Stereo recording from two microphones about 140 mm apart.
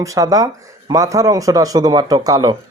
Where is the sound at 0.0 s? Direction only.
25° right (ahead or behind).